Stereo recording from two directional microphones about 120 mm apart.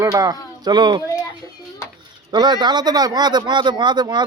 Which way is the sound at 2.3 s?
35° right (ahead or behind).